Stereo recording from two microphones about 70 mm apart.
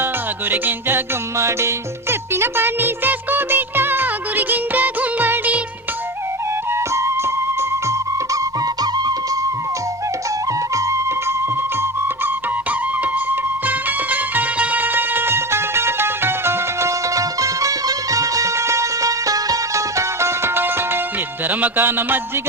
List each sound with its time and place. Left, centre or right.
0.5 s music: right
6.7 s music: right
8.6 s music: right
10.8 s music: right
11.8 s music: right
17.2 s music: right